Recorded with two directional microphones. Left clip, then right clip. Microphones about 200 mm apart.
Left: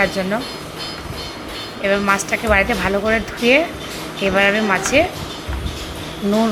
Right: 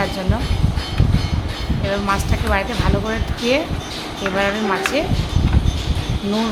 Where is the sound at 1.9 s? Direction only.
10° left (ahead or behind).